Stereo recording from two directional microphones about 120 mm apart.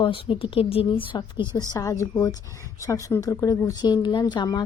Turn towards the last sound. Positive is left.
turn(degrees=35)  # may be behind; listen again after turning